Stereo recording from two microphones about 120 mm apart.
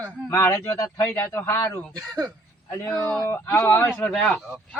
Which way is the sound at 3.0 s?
10° left (ahead or behind).